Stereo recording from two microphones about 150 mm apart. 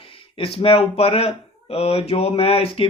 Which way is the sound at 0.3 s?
40° left (ahead or behind).